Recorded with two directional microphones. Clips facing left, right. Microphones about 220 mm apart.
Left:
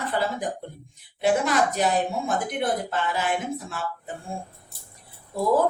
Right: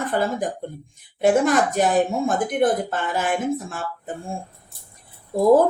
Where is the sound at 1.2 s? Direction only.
50° right (ahead or behind).